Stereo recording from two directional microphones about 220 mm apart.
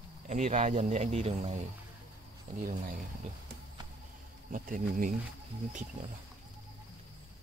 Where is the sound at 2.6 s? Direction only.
40° right (ahead or behind).